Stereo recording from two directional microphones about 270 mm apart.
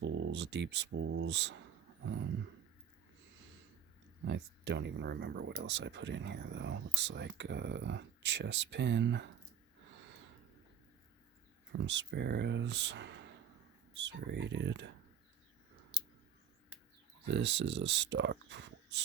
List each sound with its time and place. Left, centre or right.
0.0 s speech: right
4.3 s speech: right
11.7 s speech: right
17.3 s speech: right